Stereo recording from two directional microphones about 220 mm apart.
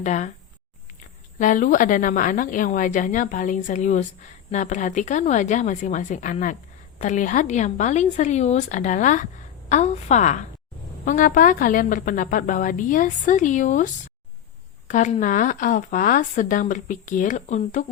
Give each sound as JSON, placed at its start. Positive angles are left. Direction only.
{"t": 0.0, "sound": "speech", "side_deg": 30}
{"t": 1.4, "sound": "speech", "side_deg": 35}